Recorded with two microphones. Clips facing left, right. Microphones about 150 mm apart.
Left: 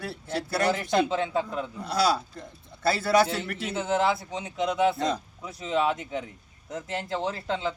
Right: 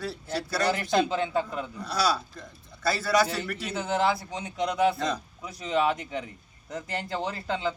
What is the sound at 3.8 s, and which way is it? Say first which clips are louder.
Speech: left 1 dB; centre (ahead or behind).